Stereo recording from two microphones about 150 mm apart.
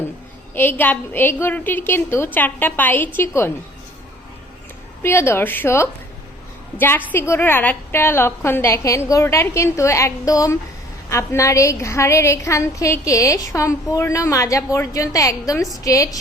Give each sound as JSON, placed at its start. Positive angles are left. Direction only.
{"t": 0.5, "sound": "a woman's voice", "side_deg": 15}
{"t": 5.0, "sound": "a woman's voice", "side_deg": 15}